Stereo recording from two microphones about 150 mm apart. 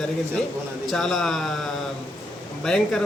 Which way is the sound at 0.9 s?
Centre (ahead or behind).